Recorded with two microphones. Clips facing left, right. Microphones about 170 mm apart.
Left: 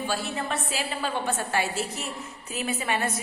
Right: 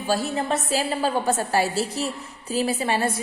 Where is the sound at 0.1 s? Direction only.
40° right (ahead or behind).